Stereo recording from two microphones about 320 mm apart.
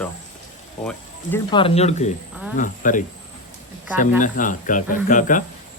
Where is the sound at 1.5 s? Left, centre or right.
Centre.